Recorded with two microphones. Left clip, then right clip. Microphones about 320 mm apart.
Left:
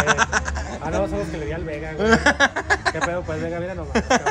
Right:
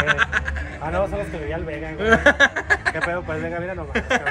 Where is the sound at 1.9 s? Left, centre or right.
Centre.